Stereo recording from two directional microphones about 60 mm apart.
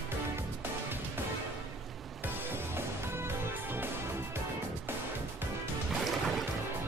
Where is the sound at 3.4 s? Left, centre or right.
Right.